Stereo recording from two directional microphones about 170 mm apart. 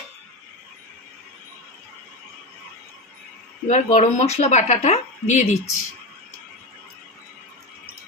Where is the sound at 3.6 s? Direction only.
45° left (ahead or behind).